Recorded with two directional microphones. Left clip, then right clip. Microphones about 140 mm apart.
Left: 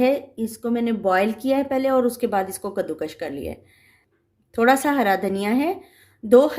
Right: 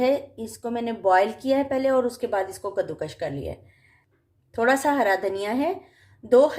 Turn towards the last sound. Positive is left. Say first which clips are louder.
# left 2 dB
turn(degrees=55)  # may be behind; listen again after turning